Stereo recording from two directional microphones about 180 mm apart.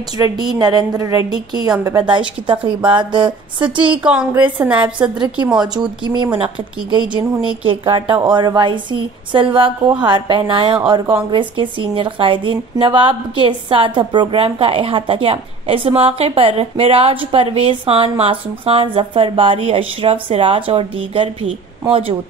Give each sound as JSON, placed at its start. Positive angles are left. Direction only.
{"t": 0.2, "sound": "a woman's voice", "side_deg": -25}
{"t": 4.0, "sound": "a woman's voice", "side_deg": -5}
{"t": 5.8, "sound": "a woman's voice", "side_deg": -25}